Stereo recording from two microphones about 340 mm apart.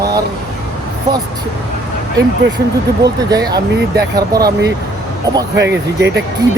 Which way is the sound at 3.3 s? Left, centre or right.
Centre.